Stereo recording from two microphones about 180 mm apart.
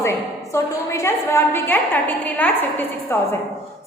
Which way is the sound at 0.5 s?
15° left (ahead or behind).